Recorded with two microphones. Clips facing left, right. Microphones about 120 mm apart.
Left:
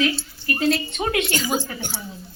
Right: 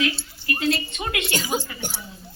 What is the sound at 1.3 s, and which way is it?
Speech, 15° right (ahead or behind).